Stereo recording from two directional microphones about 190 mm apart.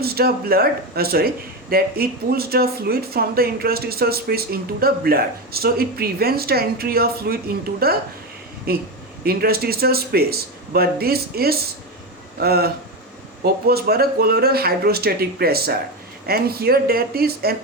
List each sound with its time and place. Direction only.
0.0 s speech: 55° right (ahead or behind)